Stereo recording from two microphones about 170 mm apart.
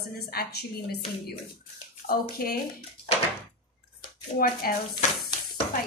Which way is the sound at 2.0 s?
60° left (ahead or behind).